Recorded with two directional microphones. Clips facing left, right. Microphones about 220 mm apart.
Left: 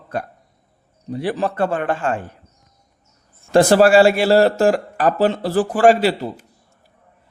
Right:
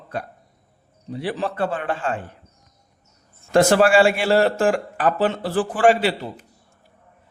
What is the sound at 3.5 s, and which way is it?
A man's voice, 35° left (ahead or behind).